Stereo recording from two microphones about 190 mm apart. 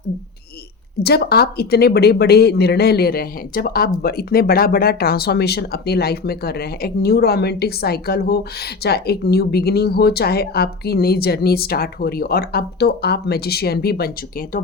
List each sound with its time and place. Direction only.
1.0 s speech: 55° left (ahead or behind)